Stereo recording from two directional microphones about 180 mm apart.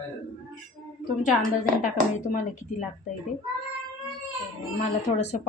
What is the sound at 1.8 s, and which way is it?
Speech, 45° left (ahead or behind).